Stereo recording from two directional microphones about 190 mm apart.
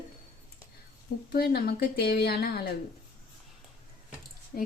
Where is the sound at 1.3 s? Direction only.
55° left (ahead or behind).